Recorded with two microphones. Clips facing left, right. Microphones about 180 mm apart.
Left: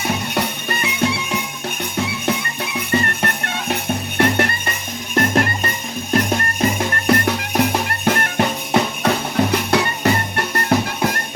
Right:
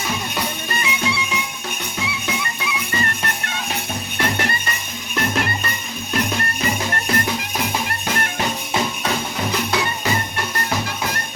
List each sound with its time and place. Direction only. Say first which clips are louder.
0.3 s music: left 3 dB; 55° left (ahead or behind)